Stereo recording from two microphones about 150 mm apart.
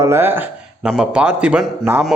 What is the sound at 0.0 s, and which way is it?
A man's voice, 15° right (ahead or behind).